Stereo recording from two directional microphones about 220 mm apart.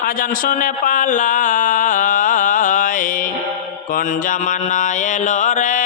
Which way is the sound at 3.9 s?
35° left (ahead or behind).